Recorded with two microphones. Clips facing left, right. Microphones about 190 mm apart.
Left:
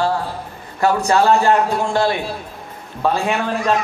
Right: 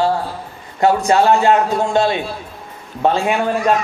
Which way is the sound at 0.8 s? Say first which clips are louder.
Right 2 dB; 20° right (ahead or behind).